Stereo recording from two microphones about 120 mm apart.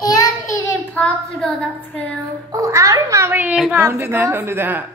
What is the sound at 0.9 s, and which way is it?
Child singing, 10° left (ahead or behind).